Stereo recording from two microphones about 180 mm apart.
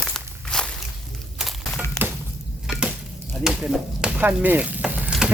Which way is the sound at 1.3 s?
Centre (ahead or behind).